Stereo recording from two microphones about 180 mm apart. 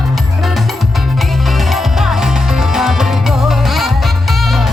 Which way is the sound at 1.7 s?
Centre (ahead or behind).